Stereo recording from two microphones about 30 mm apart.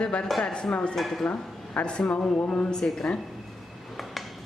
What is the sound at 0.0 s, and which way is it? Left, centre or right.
Speech, left.